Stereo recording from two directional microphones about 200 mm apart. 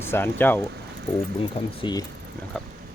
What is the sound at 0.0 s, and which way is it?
Speech, 10° left (ahead or behind).